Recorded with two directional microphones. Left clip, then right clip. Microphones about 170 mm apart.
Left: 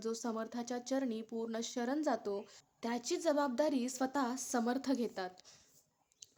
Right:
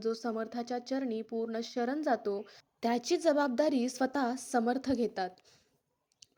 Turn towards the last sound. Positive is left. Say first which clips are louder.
# right 5 dB
turn(degrees=-20)  # may be behind; listen again after turning